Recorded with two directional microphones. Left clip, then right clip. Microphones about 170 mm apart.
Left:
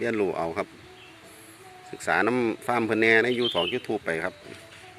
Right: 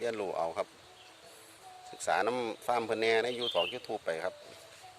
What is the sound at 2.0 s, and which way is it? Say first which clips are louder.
Speech: left 7 dB; 10° right (ahead or behind).